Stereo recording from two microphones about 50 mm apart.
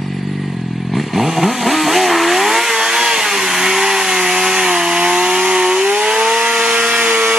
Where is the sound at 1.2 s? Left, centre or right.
Centre.